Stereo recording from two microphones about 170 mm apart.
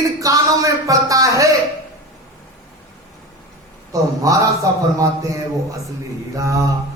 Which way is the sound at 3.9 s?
20° right (ahead or behind).